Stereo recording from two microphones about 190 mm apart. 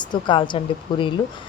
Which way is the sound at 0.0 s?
25° left (ahead or behind).